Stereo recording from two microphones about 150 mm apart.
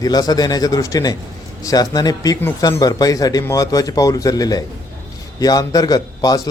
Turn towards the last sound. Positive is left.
turn(degrees=25)  # may be behind; listen again after turning